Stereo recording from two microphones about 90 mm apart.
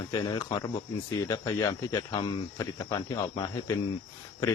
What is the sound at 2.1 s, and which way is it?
Speech, 55° left (ahead or behind).